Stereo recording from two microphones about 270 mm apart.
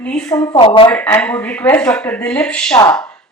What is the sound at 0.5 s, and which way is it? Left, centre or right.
Speech, centre.